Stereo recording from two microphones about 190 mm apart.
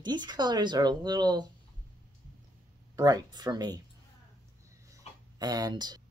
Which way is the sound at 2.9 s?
20° right (ahead or behind).